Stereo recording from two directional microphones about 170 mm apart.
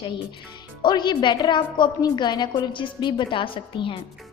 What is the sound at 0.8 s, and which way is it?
A woman's voice, 25° left (ahead or behind).